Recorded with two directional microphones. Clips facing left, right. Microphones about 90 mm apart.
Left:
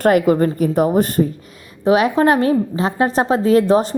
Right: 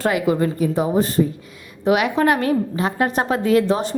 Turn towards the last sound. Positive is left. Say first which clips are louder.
# left 4 dB
turn(degrees=35)  # may be behind; listen again after turning